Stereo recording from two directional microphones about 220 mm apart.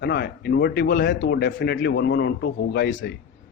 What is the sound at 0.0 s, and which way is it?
A man's voice, 50° left (ahead or behind).